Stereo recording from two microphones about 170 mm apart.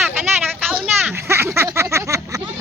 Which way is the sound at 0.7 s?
5° right (ahead or behind).